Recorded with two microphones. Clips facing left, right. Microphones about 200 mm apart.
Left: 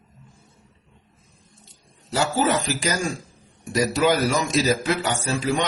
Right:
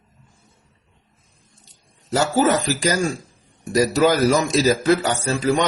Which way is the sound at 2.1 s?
45° right (ahead or behind).